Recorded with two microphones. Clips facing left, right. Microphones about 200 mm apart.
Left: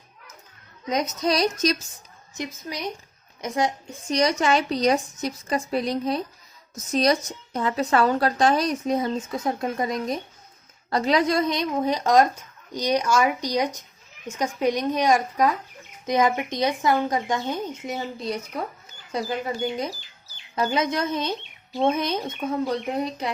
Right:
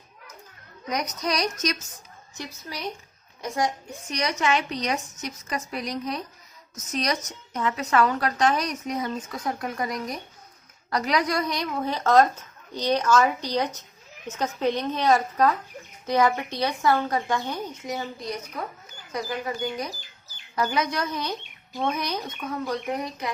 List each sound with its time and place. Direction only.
0.9 s speech: 25° left (ahead or behind)
2.3 s a woman's voice: 20° left (ahead or behind)